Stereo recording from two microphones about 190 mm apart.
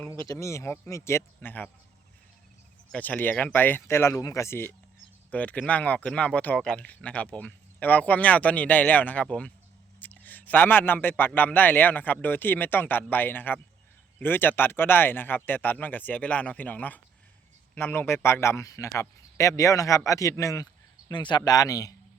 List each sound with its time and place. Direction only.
0.0 s speech: 15° left (ahead or behind)
2.9 s speech: 10° left (ahead or behind)